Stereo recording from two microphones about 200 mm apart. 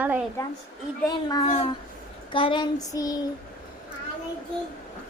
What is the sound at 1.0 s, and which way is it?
A child's voice, 20° left (ahead or behind).